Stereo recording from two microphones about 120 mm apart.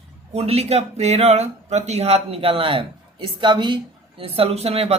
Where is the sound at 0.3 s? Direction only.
60° right (ahead or behind); by 3.8 s 40° right (ahead or behind).